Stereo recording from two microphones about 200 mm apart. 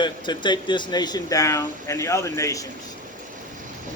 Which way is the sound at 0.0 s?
20° left (ahead or behind).